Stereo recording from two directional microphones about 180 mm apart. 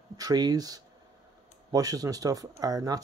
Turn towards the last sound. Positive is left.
turn(degrees=-20)  # may be behind; listen again after turning